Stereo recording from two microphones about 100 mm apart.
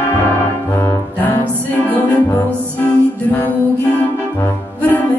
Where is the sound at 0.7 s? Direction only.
25° left (ahead or behind).